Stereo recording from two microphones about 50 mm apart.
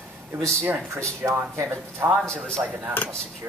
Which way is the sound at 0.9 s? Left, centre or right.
Right.